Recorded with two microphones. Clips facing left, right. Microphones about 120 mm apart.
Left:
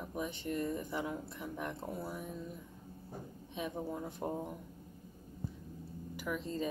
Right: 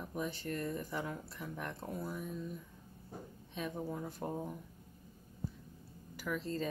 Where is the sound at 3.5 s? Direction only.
15° left (ahead or behind).